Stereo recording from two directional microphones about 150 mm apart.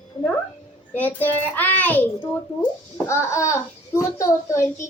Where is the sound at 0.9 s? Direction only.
10° left (ahead or behind).